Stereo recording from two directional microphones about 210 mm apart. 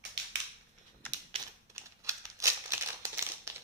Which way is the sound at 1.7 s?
15° right (ahead or behind).